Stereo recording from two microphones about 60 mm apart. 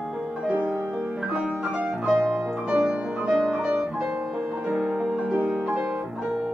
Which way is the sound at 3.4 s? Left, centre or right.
Centre.